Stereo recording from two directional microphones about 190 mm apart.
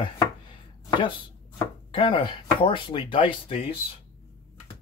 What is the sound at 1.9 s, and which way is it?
Speech, 25° left (ahead or behind).